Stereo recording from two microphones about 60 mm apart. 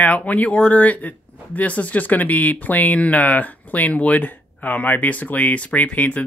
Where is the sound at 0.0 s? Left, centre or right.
Left.